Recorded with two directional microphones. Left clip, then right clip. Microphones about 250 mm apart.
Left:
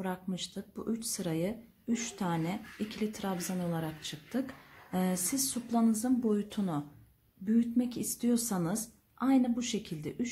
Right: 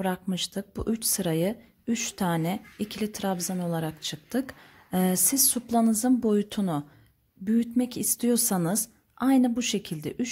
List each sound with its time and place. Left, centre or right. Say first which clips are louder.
0.0 s speech: right 8 dB; right